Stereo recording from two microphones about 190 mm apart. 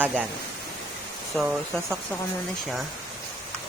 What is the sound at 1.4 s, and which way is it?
Speech, 5° right (ahead or behind).